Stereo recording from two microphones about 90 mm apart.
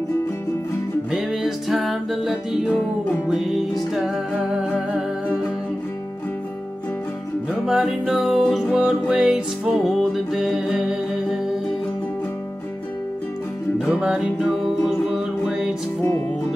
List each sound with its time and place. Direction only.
1.1 s music: 5° right (ahead or behind)
7.6 s music: 5° right (ahead or behind)
13.8 s music: 10° right (ahead or behind)